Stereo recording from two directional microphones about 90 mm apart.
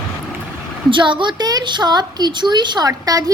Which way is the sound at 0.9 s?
60° right (ahead or behind).